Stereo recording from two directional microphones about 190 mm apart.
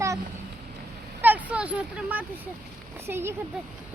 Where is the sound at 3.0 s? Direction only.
15° right (ahead or behind).